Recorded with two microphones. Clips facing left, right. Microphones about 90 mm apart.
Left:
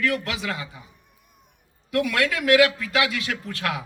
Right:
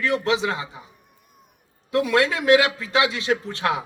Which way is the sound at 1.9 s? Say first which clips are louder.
Right 3 dB; 25° right (ahead or behind).